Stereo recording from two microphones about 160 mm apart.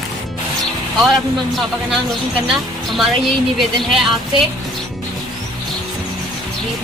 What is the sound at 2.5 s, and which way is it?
Speech, centre (ahead or behind).